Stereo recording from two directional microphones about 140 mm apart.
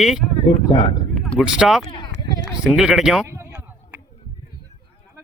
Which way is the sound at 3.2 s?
20° right (ahead or behind).